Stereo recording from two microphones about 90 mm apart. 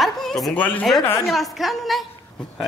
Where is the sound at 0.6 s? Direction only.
20° left (ahead or behind).